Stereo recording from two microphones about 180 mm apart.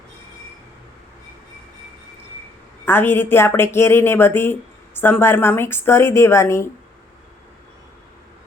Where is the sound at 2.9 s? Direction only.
10° left (ahead or behind).